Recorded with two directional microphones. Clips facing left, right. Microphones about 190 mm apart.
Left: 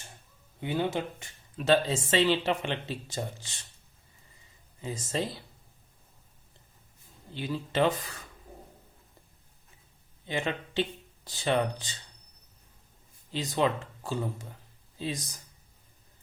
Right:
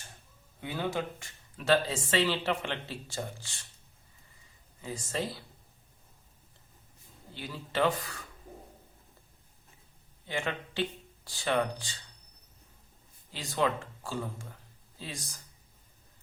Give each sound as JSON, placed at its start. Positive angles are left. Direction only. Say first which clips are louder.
{"t": 0.6, "sound": "speech", "louder": "left 3 dB", "side_deg": 20}
{"t": 4.8, "sound": "speech", "louder": "left 3 dB", "side_deg": 25}
{"t": 7.3, "sound": "speech", "louder": "left 4 dB", "side_deg": 20}
{"t": 10.2, "sound": "speech", "louder": "left 3 dB", "side_deg": 20}
{"t": 13.3, "sound": "speech", "louder": "left 3 dB", "side_deg": 20}